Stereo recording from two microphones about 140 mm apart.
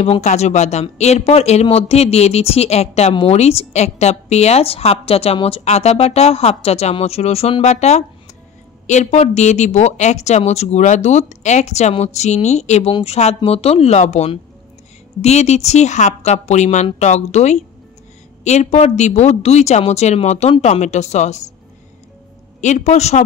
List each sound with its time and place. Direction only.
0.0 s a man's voice: 50° left (ahead or behind)
22.6 s a man's voice: 55° left (ahead or behind)